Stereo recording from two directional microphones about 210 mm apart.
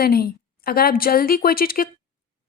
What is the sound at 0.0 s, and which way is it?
A woman's voice, 45° left (ahead or behind).